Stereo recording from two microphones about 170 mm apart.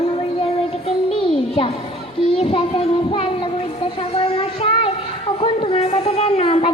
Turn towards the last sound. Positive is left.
turn(degrees=35)  # may be behind; listen again after turning